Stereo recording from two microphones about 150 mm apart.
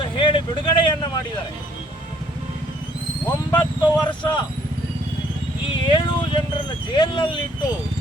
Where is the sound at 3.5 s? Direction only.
30° left (ahead or behind).